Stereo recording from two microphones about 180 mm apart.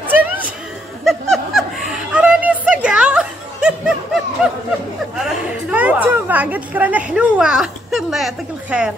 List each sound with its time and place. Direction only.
1.0 s snicker: centre (ahead or behind)
2.1 s music: 5° right (ahead or behind)
4.4 s a sound: 5° right (ahead or behind)